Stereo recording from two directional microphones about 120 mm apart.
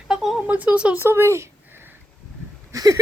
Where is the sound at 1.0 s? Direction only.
20° right (ahead or behind).